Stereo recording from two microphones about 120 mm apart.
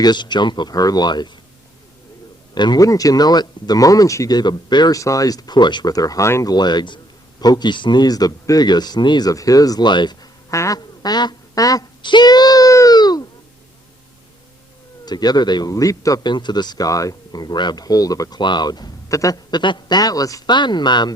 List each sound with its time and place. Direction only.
0.0 s a man's voice: 40° left (ahead or behind)
2.6 s a man's voice: 35° left (ahead or behind)
6.5 s a man's voice: 35° left (ahead or behind)
10.5 s quack: 25° left (ahead or behind)
15.0 s a man's voice: 35° left (ahead or behind)